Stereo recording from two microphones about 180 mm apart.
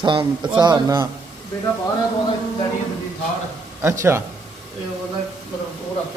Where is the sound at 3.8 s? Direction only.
15° right (ahead or behind).